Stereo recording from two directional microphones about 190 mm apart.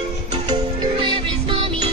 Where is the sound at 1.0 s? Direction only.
25° right (ahead or behind).